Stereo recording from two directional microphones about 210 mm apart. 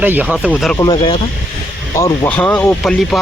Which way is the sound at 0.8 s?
25° left (ahead or behind).